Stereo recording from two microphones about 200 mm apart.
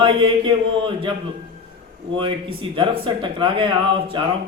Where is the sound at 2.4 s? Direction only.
25° right (ahead or behind).